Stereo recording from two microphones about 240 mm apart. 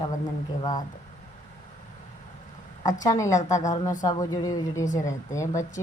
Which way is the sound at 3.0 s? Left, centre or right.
Centre.